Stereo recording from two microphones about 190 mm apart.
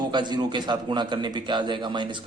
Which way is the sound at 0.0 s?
25° right (ahead or behind).